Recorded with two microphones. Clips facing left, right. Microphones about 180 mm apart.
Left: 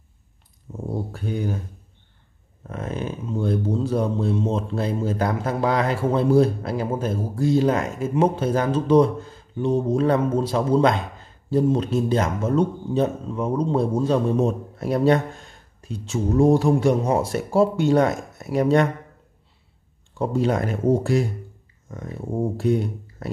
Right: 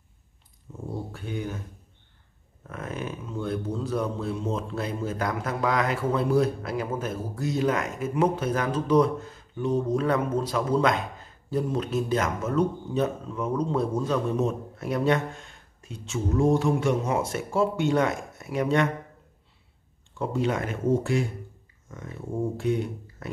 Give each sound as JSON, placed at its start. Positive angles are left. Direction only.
{"t": 0.7, "sound": "a sound", "side_deg": 40}
{"t": 1.1, "sound": "speech", "side_deg": 40}
{"t": 2.6, "sound": "speech", "side_deg": 30}
{"t": 20.2, "sound": "speech", "side_deg": 35}